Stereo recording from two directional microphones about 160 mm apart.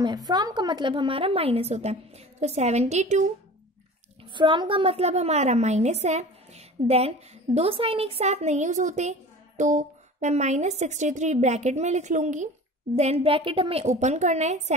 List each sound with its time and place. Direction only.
0.0 s a woman's voice: 25° right (ahead or behind); by 3.3 s 45° right (ahead or behind)
4.2 s a woman's voice: 30° right (ahead or behind)
13.9 s a woman's voice: 50° right (ahead or behind)